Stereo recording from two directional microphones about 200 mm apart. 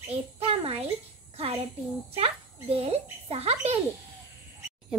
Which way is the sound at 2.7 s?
30° right (ahead or behind).